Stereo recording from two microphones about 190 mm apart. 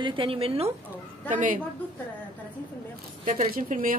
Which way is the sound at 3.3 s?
45° right (ahead or behind).